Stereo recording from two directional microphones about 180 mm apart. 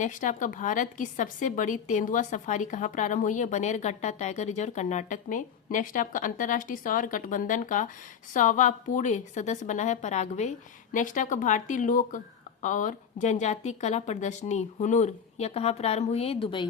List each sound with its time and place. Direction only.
0.0 s a woman's voice: 45° left (ahead or behind); by 16.6 s 30° left (ahead or behind)